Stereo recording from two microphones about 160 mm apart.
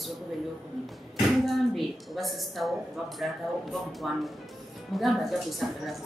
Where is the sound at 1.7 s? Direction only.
Centre (ahead or behind).